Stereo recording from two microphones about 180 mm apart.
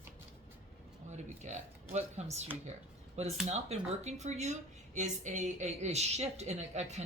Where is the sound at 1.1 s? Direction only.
40° right (ahead or behind).